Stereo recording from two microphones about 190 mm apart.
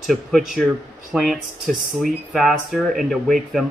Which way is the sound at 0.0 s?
Centre (ahead or behind).